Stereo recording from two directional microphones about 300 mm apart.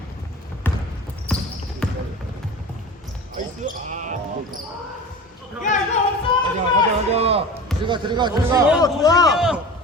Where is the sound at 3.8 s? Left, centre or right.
Right.